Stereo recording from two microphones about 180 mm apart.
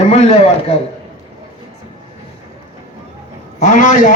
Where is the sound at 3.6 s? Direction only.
45° left (ahead or behind).